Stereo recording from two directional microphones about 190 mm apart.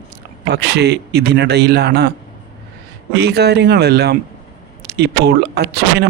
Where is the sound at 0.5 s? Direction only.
60° right (ahead or behind).